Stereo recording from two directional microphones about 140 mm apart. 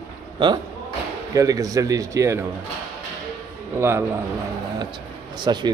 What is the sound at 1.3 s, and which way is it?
Speech, 25° right (ahead or behind).